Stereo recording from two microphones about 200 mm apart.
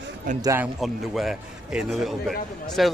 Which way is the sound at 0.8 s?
Centre (ahead or behind).